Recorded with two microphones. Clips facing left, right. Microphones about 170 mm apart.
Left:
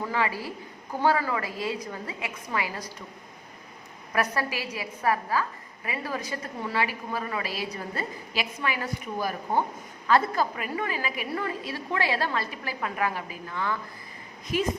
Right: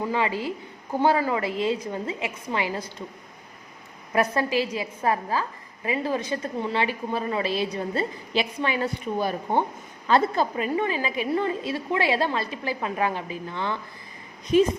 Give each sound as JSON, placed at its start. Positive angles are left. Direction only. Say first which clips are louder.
{"t": 0.0, "sound": "a woman's voice", "louder": "right 3 dB", "side_deg": -20}
{"t": 4.1, "sound": "a woman's voice", "louder": "right 5 dB", "side_deg": -25}